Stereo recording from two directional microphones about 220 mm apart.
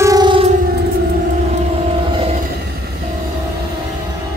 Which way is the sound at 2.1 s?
25° right (ahead or behind).